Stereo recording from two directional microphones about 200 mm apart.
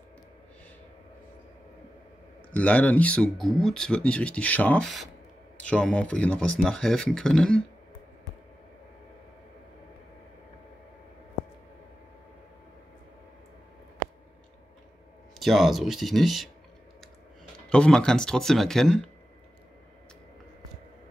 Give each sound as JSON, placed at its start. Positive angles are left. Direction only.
{"t": 2.5, "sound": "speech", "side_deg": 5}
{"t": 15.3, "sound": "speech", "side_deg": 0}
{"t": 17.6, "sound": "speech", "side_deg": 5}